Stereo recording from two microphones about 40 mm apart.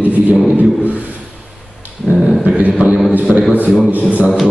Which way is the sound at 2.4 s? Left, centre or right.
Right.